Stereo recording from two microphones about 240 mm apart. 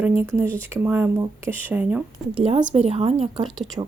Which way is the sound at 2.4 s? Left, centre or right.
Right.